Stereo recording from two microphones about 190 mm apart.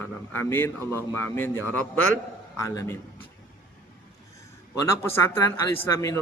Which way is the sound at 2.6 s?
15° left (ahead or behind).